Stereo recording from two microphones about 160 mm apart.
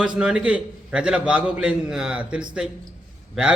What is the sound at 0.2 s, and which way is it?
A man's voice, 5° right (ahead or behind).